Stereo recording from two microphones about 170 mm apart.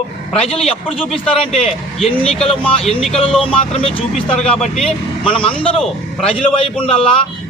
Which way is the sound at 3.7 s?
35° left (ahead or behind).